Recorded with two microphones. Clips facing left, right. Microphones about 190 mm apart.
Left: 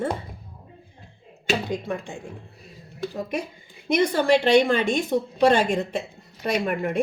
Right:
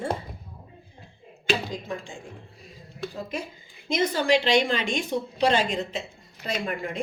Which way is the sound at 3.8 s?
60° left (ahead or behind).